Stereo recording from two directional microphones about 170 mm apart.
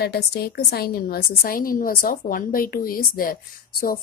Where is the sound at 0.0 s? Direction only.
70° left (ahead or behind).